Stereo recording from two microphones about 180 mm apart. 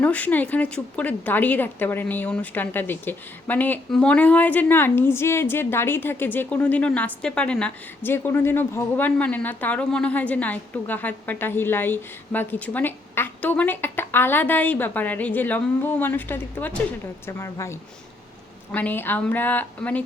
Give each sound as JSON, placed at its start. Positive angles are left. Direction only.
{"t": 0.0, "sound": "a woman's voice", "side_deg": 10}